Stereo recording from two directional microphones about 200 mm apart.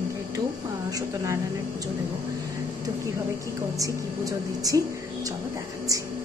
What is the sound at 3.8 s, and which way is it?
A woman's voice, 15° right (ahead or behind).